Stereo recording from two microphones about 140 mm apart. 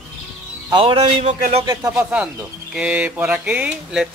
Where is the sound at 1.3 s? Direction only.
55° right (ahead or behind).